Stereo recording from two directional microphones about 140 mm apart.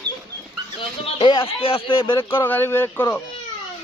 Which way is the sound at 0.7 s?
35° left (ahead or behind).